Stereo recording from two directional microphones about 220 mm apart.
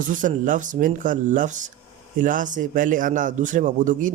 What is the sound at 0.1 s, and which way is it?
Speech, 35° right (ahead or behind).